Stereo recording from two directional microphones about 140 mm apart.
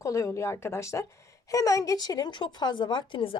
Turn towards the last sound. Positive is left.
turn(degrees=35)  # may be behind; listen again after turning